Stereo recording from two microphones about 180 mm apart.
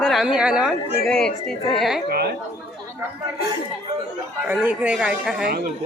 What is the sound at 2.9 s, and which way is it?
Chatter, 15° right (ahead or behind).